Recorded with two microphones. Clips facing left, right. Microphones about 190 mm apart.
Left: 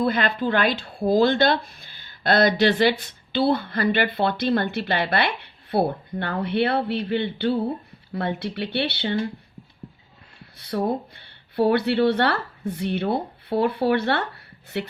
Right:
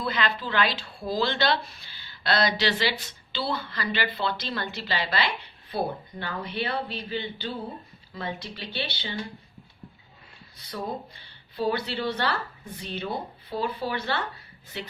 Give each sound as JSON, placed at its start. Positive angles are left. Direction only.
{"t": 0.0, "sound": "speech", "side_deg": 50}
{"t": 10.6, "sound": "speech", "side_deg": 65}